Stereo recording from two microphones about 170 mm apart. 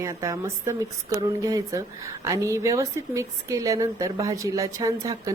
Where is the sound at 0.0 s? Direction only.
20° right (ahead or behind).